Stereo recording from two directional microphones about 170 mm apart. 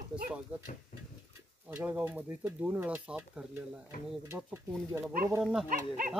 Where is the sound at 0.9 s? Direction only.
50° left (ahead or behind).